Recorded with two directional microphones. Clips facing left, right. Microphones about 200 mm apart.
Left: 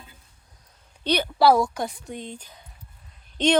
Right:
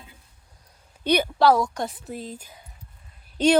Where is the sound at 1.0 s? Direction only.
10° right (ahead or behind).